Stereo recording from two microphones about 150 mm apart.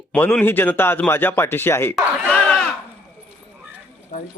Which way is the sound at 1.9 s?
10° left (ahead or behind).